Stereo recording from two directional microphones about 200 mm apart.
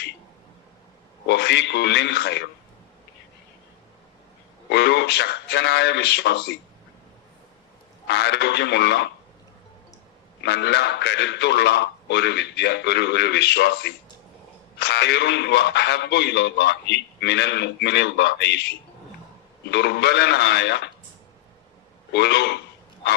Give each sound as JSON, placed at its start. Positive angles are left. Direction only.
{"t": 1.3, "sound": "speech", "side_deg": 55}
{"t": 4.7, "sound": "speech", "side_deg": 55}
{"t": 8.0, "sound": "speech", "side_deg": 55}
{"t": 10.4, "sound": "speech", "side_deg": 55}
{"t": 19.7, "sound": "speech", "side_deg": 55}
{"t": 22.1, "sound": "speech", "side_deg": 55}